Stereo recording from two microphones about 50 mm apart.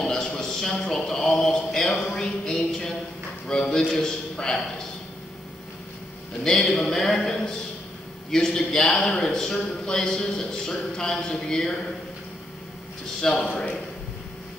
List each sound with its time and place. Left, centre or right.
0.0 s a sound: centre
6.4 s a man's voice: centre
13.2 s a man's voice: centre